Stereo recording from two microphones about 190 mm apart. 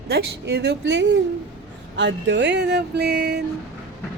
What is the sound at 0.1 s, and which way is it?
Speech, 60° right (ahead or behind).